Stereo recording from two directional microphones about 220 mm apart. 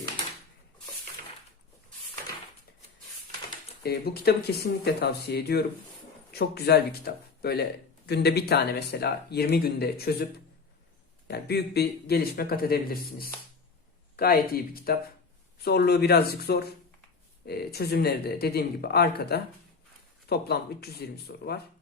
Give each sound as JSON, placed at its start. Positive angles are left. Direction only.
{"t": 3.8, "sound": "speech", "side_deg": 45}
{"t": 11.3, "sound": "speech", "side_deg": 45}